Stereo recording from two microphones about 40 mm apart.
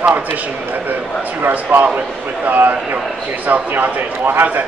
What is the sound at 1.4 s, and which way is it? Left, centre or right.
Speech, right.